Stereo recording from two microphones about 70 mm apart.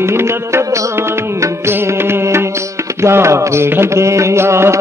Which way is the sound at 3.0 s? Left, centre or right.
Right.